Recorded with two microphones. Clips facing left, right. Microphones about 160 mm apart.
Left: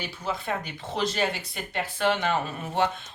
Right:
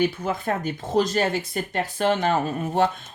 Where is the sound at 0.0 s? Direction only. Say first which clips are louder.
Right 9 dB; 50° right (ahead or behind).